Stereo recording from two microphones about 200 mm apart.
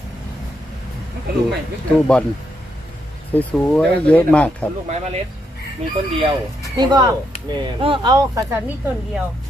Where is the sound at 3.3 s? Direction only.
5° left (ahead or behind).